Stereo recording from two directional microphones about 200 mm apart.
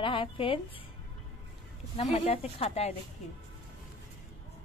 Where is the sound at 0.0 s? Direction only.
25° left (ahead or behind).